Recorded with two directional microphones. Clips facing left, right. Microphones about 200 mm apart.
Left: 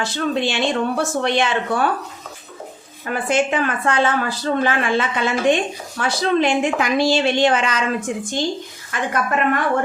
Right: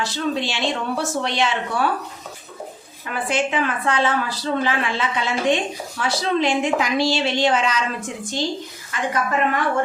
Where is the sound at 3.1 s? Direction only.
45° left (ahead or behind).